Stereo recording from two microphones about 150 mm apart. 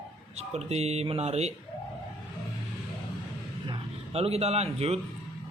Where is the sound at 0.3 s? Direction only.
45° right (ahead or behind).